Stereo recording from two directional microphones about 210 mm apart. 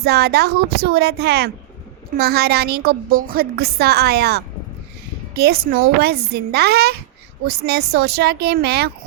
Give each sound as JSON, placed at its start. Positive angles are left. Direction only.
{"t": 0.0, "sound": "a woman's voice", "side_deg": -50}